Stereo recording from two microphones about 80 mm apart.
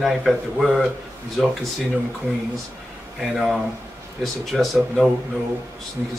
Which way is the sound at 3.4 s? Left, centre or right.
Centre.